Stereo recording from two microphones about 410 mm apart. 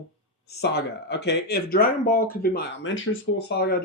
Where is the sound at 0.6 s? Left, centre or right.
Left.